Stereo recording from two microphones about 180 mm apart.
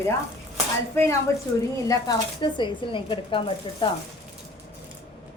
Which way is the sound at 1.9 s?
25° left (ahead or behind).